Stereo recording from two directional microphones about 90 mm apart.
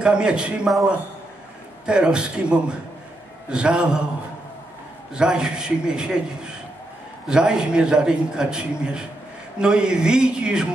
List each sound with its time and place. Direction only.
0.0 s a man's voice: 10° right (ahead or behind)
1.9 s a man's voice: 10° right (ahead or behind)
5.1 s a man's voice: 10° right (ahead or behind)